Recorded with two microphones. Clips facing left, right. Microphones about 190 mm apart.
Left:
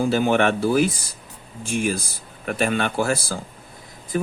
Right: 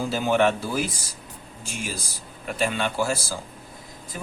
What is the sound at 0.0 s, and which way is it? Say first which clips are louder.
Speech: left 3 dB; 55° left (ahead or behind).